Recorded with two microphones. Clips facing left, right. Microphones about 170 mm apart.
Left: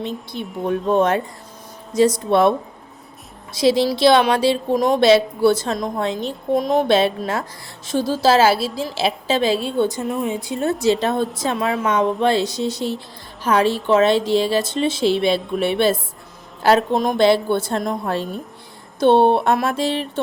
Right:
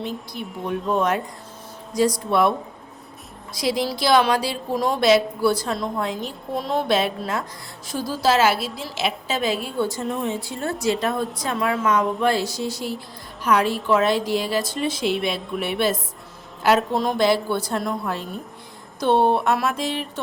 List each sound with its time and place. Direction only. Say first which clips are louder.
0.7 s speech: left 5 dB; 25° left (ahead or behind)
18.9 s speech: left 5 dB; 25° left (ahead or behind)